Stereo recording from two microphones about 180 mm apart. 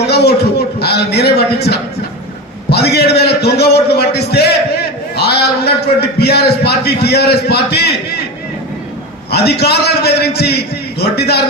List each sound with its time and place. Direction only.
0.1 s a sound: 65° left (ahead or behind)
0.8 s a man's voice: 65° left (ahead or behind)
9.3 s a man's voice: 65° left (ahead or behind)